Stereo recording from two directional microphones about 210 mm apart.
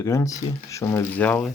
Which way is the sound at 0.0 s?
15° left (ahead or behind).